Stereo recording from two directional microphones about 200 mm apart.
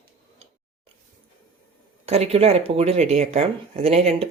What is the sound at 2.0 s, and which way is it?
Speech, 30° right (ahead or behind).